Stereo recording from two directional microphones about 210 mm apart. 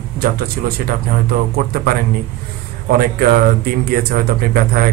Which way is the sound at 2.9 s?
45° right (ahead or behind).